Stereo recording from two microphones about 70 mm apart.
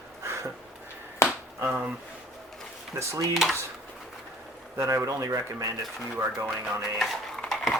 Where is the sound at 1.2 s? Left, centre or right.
Left.